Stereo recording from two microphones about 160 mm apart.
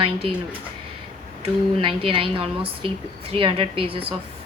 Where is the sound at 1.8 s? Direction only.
35° right (ahead or behind).